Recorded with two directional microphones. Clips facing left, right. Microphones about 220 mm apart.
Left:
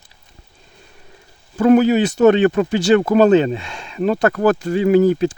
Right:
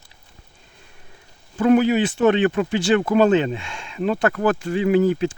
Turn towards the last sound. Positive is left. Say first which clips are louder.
# left 4 dB
turn(degrees=40)  # may be behind; listen again after turning